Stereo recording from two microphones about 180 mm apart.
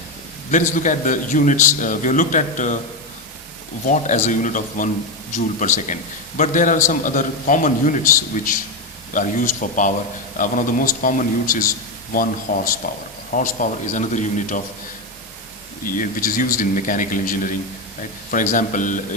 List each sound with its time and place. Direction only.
0.5 s a man's voice: 45° left (ahead or behind)
3.8 s a man's voice: 40° left (ahead or behind)
15.9 s a man's voice: 50° left (ahead or behind)